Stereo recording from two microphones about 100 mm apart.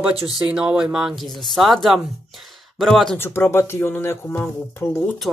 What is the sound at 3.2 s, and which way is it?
Speech, 25° left (ahead or behind).